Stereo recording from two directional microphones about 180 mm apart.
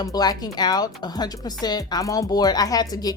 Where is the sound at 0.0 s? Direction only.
20° left (ahead or behind).